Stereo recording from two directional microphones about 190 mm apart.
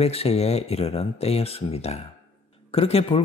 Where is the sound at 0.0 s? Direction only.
30° left (ahead or behind).